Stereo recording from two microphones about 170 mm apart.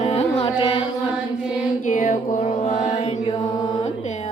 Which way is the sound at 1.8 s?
50° left (ahead or behind).